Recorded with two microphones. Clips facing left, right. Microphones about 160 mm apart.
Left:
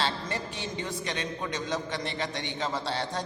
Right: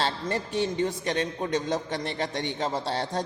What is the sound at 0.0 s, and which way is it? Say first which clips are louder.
A man's voice: right 3 dB; 50° right (ahead or behind).